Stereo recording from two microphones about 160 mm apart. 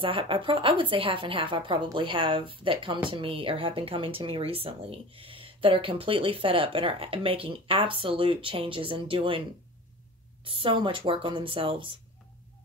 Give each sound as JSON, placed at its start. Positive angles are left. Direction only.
{"t": 0.0, "sound": "speech", "side_deg": -35}
{"t": 10.4, "sound": "speech", "side_deg": -35}